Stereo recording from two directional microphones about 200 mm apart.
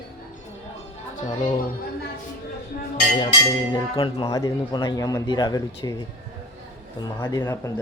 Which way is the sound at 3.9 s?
25° left (ahead or behind).